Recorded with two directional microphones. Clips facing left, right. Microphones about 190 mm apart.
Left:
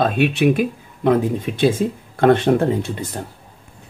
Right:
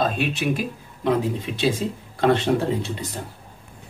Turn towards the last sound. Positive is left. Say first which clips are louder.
# left 4 dB
turn(degrees=55)  # may be behind; listen again after turning